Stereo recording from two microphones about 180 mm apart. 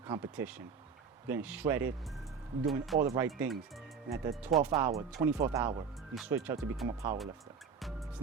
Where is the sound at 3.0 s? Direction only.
15° right (ahead or behind).